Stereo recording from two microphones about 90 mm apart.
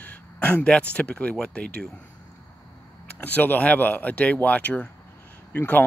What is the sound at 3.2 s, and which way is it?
Speech, 20° left (ahead or behind).